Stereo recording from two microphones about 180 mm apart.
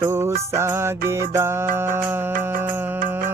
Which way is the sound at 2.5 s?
50° right (ahead or behind).